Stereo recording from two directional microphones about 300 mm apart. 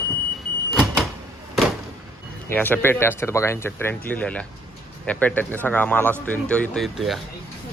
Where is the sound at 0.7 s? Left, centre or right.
Centre.